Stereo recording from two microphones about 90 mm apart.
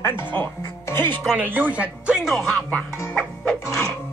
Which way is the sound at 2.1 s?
5° right (ahead or behind).